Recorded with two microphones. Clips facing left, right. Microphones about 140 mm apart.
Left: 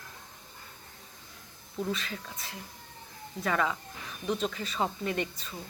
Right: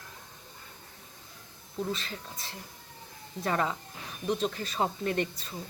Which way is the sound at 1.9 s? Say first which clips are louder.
Left 1 dB; 30° right (ahead or behind).